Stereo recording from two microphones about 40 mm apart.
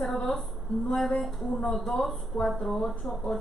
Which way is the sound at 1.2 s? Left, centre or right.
Centre.